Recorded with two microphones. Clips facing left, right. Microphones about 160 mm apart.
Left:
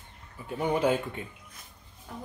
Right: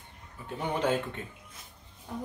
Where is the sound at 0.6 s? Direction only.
10° left (ahead or behind).